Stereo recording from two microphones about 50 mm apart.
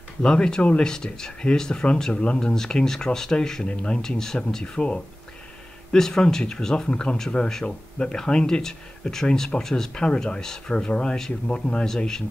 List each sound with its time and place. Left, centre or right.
0.2 s speech: centre
2.5 s speech: centre
4.0 s speech: centre
5.9 s speech: centre